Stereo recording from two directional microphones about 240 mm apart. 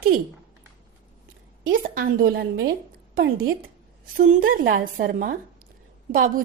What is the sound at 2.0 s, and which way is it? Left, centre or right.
A woman's voice, right.